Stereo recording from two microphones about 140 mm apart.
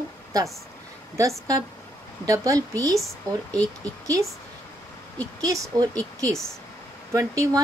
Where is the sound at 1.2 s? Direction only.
25° right (ahead or behind).